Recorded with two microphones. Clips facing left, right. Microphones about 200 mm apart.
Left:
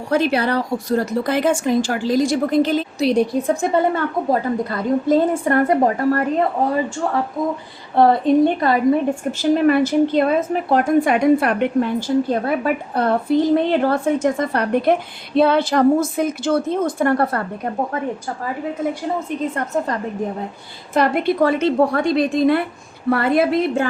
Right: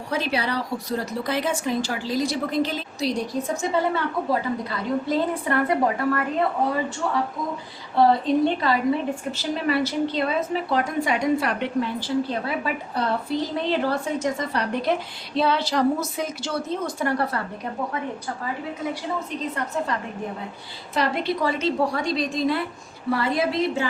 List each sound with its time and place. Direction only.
0.1 s a woman's voice: 50° left (ahead or behind)
19.4 s a woman's voice: 45° left (ahead or behind)